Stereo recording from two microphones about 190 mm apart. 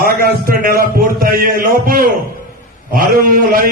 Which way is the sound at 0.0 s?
50° right (ahead or behind).